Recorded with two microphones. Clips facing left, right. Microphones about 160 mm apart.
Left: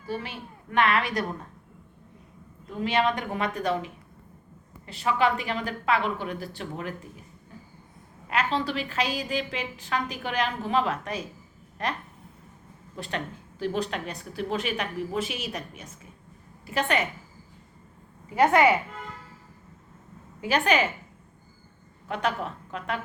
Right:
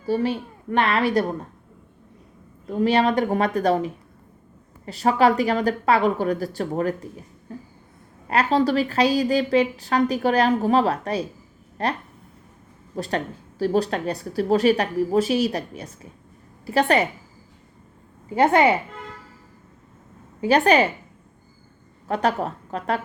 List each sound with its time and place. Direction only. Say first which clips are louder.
0.0 s a woman's voice: right 11 dB; 35° right (ahead or behind)
2.6 s a woman's voice: right 6 dB; 40° right (ahead or behind)
8.3 s a woman's voice: right 8 dB; 40° right (ahead or behind)
13.0 s a woman's voice: right 7 dB; 40° right (ahead or behind)
18.3 s speech: right 3 dB; 30° right (ahead or behind)
20.4 s a woman's voice: right 7 dB; 35° right (ahead or behind)
22.0 s a woman's voice: right 6 dB; 40° right (ahead or behind)